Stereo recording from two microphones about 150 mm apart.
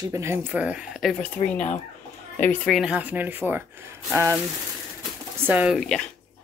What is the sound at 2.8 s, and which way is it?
Speech, 10° right (ahead or behind).